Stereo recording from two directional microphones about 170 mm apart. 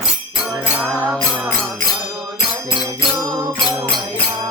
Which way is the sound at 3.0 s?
25° right (ahead or behind).